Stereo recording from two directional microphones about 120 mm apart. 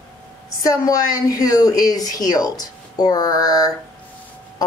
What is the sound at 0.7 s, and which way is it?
A woman's voice, 30° left (ahead or behind).